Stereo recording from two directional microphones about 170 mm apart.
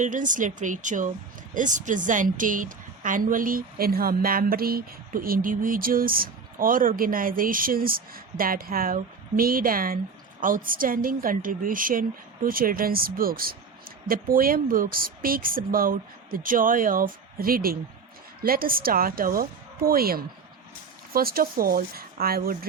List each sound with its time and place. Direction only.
0.0 s a woman's voice: 50° right (ahead or behind)